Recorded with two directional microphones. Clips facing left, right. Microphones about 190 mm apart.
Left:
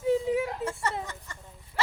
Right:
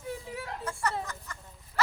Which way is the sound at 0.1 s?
20° left (ahead or behind).